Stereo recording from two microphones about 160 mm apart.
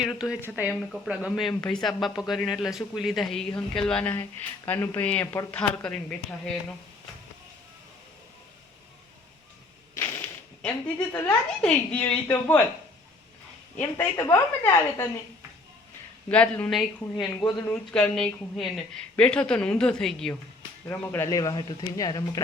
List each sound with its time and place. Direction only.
0.0 s speech: 5° right (ahead or behind)
9.9 s a sound: 10° left (ahead or behind)
11.6 s speech: 5° left (ahead or behind)
13.7 s speech: 20° left (ahead or behind)
16.3 s speech: 5° left (ahead or behind)
20.8 s speech: 15° left (ahead or behind)